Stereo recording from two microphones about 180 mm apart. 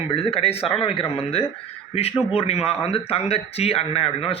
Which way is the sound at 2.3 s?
35° left (ahead or behind).